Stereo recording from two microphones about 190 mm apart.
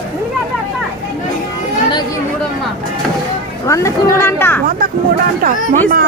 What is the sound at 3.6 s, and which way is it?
Speech, 15° left (ahead or behind).